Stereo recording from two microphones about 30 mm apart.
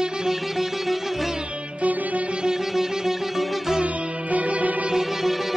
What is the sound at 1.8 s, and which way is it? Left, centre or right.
Music, right.